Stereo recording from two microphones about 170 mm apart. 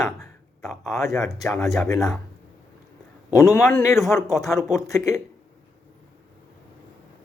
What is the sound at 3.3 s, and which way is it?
Speech, 15° left (ahead or behind).